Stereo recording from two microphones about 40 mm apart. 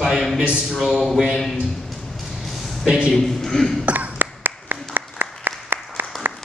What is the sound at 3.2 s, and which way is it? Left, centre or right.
Speech, centre.